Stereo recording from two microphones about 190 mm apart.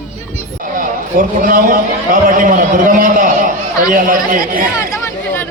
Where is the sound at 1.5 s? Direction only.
45° right (ahead or behind).